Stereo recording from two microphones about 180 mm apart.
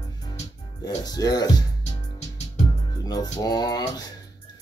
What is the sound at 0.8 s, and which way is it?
Speech, 20° left (ahead or behind).